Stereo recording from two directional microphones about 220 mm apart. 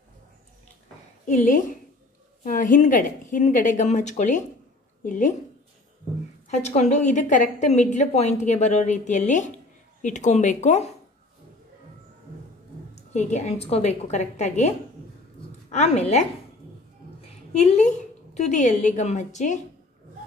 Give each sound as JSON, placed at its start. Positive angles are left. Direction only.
{"t": 1.2, "sound": "a woman's voice", "side_deg": 35}
{"t": 6.5, "sound": "a woman's voice", "side_deg": 30}
{"t": 12.9, "sound": "a woman's voice", "side_deg": 30}
{"t": 15.7, "sound": "a woman's voice", "side_deg": 30}
{"t": 17.5, "sound": "a woman's voice", "side_deg": 30}